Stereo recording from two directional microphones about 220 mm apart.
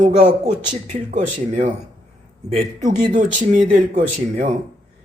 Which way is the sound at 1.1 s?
35° right (ahead or behind).